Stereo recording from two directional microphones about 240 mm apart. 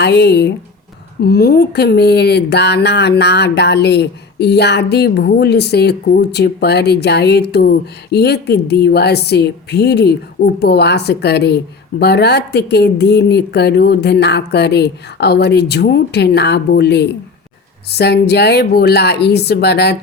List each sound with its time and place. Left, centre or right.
0.0 s speech: left